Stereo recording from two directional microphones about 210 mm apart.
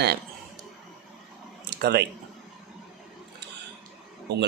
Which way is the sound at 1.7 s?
50° right (ahead or behind).